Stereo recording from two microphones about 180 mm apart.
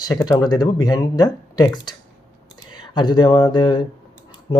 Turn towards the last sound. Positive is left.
turn(degrees=25)  # may be behind; listen again after turning